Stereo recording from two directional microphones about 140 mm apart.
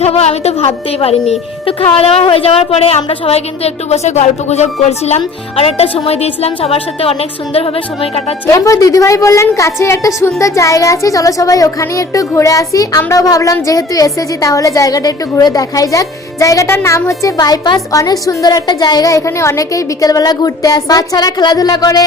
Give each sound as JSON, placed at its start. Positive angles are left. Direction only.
{"t": 0.0, "sound": "a woman's voice", "side_deg": 50}
{"t": 8.4, "sound": "speech", "side_deg": 20}